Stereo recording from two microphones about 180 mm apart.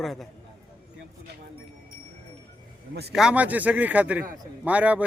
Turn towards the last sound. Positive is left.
turn(degrees=-5)  # may be behind; listen again after turning